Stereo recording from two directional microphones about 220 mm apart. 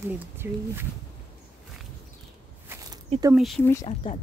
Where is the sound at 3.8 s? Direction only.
30° left (ahead or behind).